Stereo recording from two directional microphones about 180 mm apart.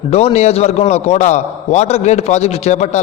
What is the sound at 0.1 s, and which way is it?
A man's voice, 35° left (ahead or behind).